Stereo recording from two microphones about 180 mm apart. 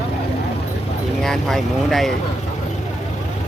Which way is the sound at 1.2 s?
Centre (ahead or behind).